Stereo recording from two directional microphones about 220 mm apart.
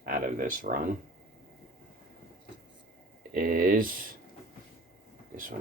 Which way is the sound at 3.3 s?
40° right (ahead or behind).